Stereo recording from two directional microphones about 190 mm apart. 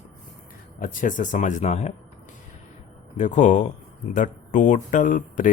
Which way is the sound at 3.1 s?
40° left (ahead or behind).